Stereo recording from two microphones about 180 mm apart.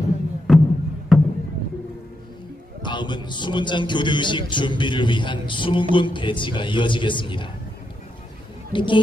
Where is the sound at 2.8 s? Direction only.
25° left (ahead or behind).